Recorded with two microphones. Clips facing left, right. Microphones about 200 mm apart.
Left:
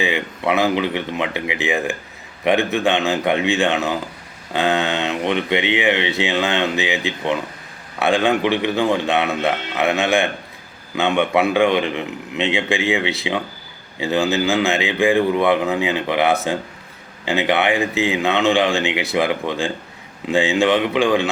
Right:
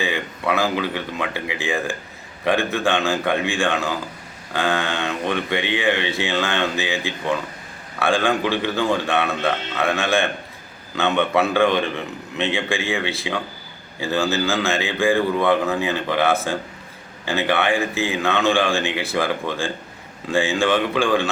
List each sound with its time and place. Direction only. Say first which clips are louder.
0.0 s speech: left 3 dB; 20° left (ahead or behind)